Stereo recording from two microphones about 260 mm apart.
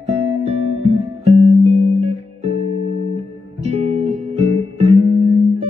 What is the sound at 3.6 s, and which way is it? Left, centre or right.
Music, right.